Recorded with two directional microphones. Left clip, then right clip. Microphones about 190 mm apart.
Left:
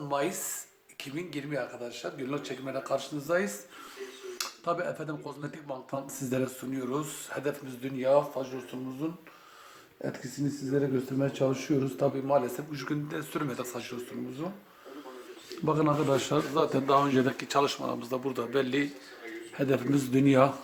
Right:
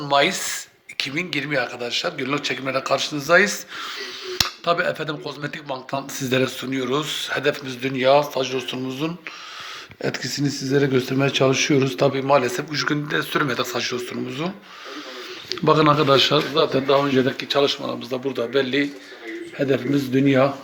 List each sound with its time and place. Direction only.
0.1 s a man's voice: 10° right (ahead or behind)
7.8 s a man's voice: 15° right (ahead or behind)
16.1 s speech: 10° left (ahead or behind)